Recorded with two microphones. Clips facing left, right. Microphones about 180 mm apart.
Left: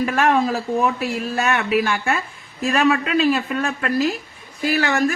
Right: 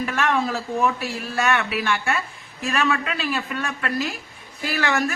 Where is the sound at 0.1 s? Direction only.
40° left (ahead or behind).